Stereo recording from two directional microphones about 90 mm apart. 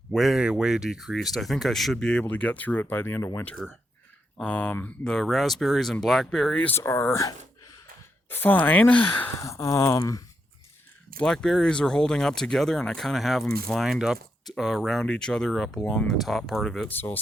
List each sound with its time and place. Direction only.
0.1 s speech: centre (ahead or behind); by 3.2 s 25° left (ahead or behind)
3.6 s speech: 5° left (ahead or behind)
4.4 s speech: 15° left (ahead or behind)
5.0 s speech: 5° left (ahead or behind)
6.7 s a sound: 30° left (ahead or behind)
8.3 s speech: 20° left (ahead or behind)
9.4 s a sound: 35° left (ahead or behind)
11.2 s speech: 10° left (ahead or behind)
13.8 s speech: 5° right (ahead or behind)
16.9 s speech: 20° left (ahead or behind)